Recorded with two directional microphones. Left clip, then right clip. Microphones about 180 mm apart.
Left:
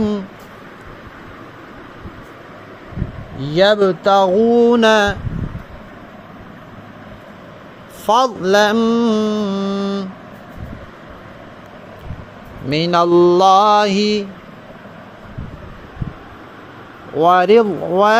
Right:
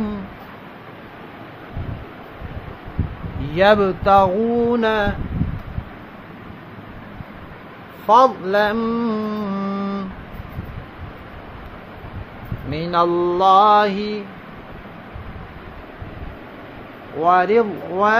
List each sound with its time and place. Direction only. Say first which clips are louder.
3.5 s speech: left 2 dB; 25° left (ahead or behind); by 5.1 s 50° left (ahead or behind)
8.1 s mantra: even; 45° left (ahead or behind); by 10.0 s 25° left (ahead or behind)
12.6 s mantra: left 4 dB; 45° left (ahead or behind)
17.2 s mantra: left 4 dB; 50° left (ahead or behind)